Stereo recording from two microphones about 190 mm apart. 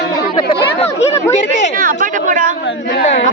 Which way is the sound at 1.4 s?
40° left (ahead or behind).